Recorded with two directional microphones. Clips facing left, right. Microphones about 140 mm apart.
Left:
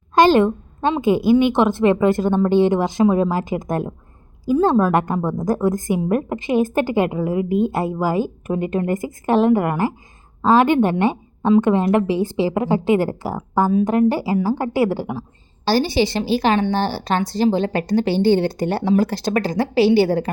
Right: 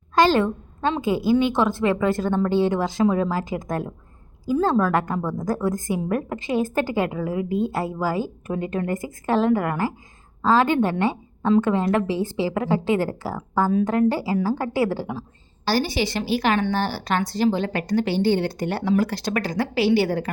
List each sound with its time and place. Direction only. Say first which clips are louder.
0.1 s a woman's voice: left 5 dB; 20° left (ahead or behind)
15.6 s a woman's voice: left 5 dB; 30° left (ahead or behind)